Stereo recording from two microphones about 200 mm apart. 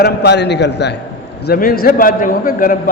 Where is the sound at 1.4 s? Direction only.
45° left (ahead or behind).